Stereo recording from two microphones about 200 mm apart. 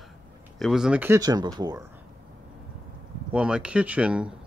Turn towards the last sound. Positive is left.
turn(degrees=-5)  # may be behind; listen again after turning